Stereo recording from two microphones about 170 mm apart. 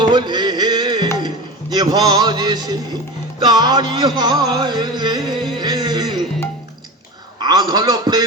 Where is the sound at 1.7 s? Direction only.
25° right (ahead or behind).